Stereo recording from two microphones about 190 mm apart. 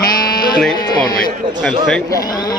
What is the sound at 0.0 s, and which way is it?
Sheep, 20° left (ahead or behind).